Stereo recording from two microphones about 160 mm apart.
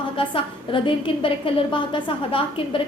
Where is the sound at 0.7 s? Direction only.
30° left (ahead or behind).